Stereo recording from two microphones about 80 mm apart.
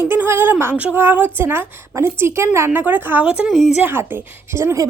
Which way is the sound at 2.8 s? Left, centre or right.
Right.